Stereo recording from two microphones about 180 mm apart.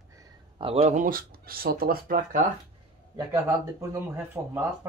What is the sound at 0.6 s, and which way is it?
Speech, 30° right (ahead or behind).